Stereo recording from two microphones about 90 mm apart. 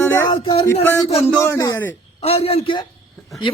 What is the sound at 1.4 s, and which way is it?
Speech, 30° left (ahead or behind).